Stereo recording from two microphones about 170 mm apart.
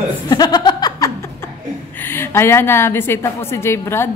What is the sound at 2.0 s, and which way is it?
A woman's voice, 15° left (ahead or behind).